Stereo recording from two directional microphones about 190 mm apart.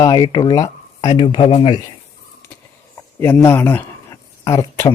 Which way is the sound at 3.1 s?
10° left (ahead or behind).